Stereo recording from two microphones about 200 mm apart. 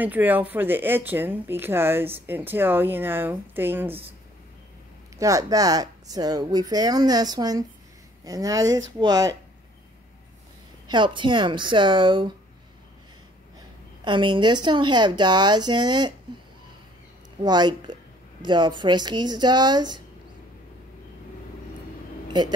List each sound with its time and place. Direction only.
0.0 s speech: 10° right (ahead or behind)
5.1 s speech: 15° right (ahead or behind)
10.9 s speech: 25° right (ahead or behind)
14.0 s speech: 25° right (ahead or behind)
17.4 s speech: 20° right (ahead or behind)